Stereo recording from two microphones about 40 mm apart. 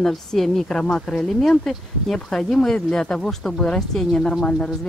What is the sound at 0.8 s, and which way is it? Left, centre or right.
Speech, left.